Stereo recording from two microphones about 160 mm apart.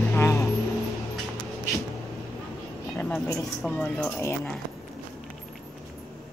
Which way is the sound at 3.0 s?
10° left (ahead or behind).